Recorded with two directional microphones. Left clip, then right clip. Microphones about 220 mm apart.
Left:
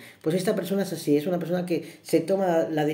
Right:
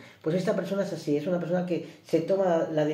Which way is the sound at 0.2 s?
40° left (ahead or behind).